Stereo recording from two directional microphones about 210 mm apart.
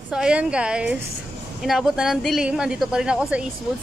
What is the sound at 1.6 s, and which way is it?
A woman's voice, centre (ahead or behind).